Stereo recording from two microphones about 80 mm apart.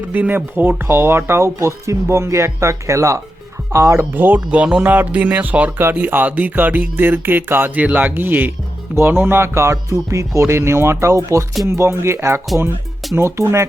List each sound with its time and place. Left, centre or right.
0.1 s speech: right
4.1 s speech: right
4.4 s speech: centre; by 13.7 s right